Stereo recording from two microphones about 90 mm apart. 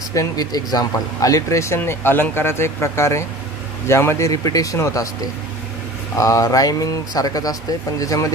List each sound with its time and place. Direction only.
0.1 s speech: 45° left (ahead or behind)
6.1 s speech: 40° left (ahead or behind)